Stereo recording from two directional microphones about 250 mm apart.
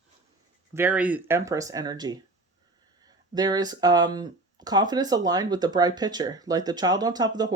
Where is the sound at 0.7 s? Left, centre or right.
Centre.